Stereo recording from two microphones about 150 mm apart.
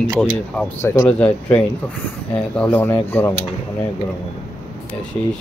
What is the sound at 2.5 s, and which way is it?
Speech, 10° left (ahead or behind).